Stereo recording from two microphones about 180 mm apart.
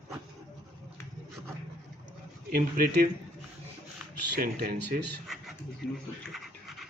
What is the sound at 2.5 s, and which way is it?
Speech, 50° right (ahead or behind).